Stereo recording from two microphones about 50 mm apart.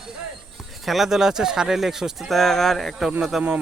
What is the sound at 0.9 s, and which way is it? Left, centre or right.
Speech, centre.